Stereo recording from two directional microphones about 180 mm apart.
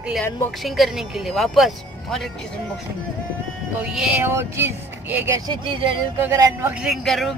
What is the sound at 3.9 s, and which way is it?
Speech, 5° right (ahead or behind).